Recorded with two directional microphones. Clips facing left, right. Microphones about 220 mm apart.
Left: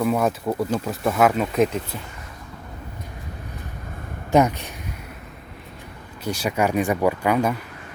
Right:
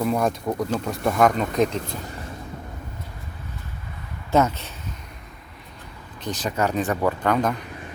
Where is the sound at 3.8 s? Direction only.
50° left (ahead or behind).